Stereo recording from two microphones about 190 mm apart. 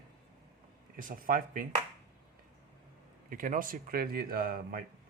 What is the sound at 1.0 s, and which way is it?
Speech, 45° right (ahead or behind).